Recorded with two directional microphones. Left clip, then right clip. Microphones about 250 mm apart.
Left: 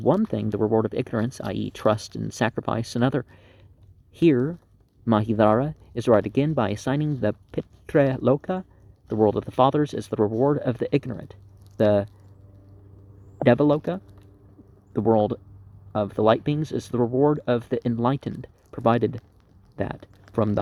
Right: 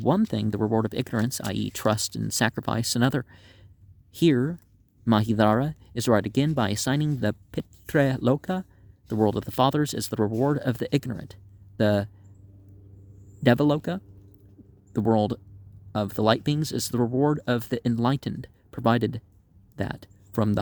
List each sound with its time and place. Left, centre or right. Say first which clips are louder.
0.0 s speech: left 2 dB; right
13.4 s speech: left 3 dB; right